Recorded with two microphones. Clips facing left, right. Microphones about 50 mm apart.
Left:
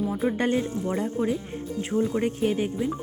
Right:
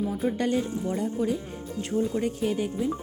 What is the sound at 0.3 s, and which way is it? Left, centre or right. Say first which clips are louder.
Speech: left 1 dB; left.